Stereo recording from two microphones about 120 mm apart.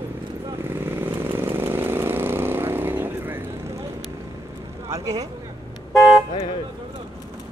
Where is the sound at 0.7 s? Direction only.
20° right (ahead or behind).